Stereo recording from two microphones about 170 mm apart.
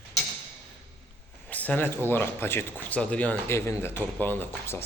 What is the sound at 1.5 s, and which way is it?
A man's voice, 10° left (ahead or behind).